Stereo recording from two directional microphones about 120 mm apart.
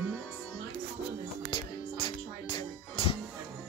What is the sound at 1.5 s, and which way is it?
Music, 45° left (ahead or behind).